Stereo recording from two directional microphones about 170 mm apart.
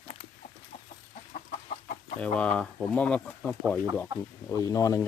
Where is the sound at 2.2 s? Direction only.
5° left (ahead or behind).